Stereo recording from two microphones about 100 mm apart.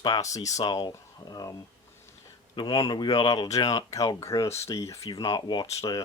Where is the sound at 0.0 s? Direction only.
35° left (ahead or behind).